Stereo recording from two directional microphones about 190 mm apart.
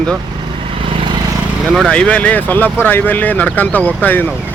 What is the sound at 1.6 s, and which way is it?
Speech, centre (ahead or behind).